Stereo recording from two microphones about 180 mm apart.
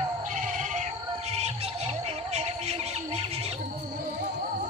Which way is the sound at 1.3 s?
35° right (ahead or behind).